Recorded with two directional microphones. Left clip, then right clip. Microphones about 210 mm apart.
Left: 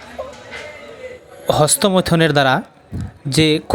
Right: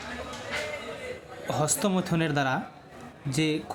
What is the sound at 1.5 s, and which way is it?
Speech, 35° left (ahead or behind).